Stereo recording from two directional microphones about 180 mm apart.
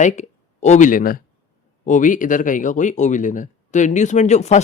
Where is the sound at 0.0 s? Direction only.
40° left (ahead or behind).